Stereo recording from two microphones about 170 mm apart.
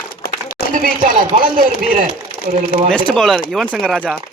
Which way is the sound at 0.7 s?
55° right (ahead or behind).